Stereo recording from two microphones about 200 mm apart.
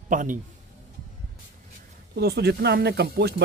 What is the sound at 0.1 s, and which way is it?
Speech, 40° right (ahead or behind).